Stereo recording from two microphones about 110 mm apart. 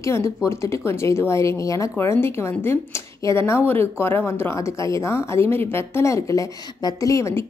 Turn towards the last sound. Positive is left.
turn(degrees=25)  # may be behind; listen again after turning